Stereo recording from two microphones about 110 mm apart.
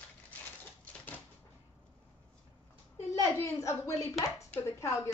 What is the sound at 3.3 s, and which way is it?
Speech, 30° left (ahead or behind).